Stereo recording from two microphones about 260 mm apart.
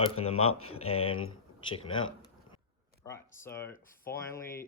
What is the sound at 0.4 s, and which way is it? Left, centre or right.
Speech, left.